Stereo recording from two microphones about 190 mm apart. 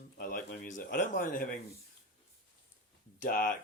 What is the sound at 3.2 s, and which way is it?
Speech, 45° left (ahead or behind).